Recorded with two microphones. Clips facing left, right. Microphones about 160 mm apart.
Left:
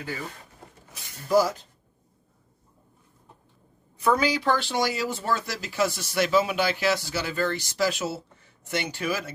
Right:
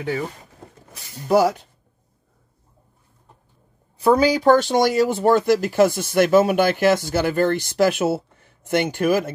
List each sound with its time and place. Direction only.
1.3 s speech: 65° right (ahead or behind)
4.0 s speech: 35° right (ahead or behind); by 9.3 s 50° right (ahead or behind)